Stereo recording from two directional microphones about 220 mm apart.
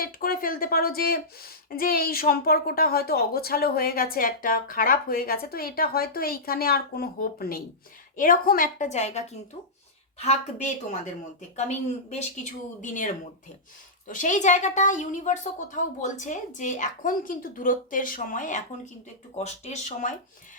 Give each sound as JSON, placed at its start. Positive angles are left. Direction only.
{"t": 0.0, "sound": "a woman's voice", "side_deg": 40}